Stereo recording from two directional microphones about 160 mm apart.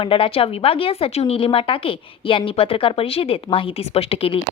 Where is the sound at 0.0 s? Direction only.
35° left (ahead or behind).